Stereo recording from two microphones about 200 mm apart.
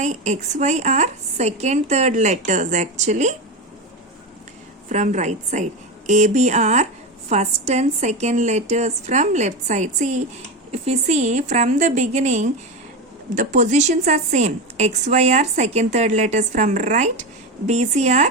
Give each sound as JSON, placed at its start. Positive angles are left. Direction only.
{"t": 0.0, "sound": "a woman's voice", "side_deg": -35}
{"t": 4.9, "sound": "a woman's voice", "side_deg": -35}